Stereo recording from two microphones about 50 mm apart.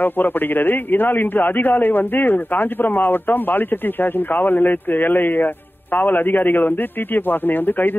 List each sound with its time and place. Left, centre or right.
0.0 s a man's voice: left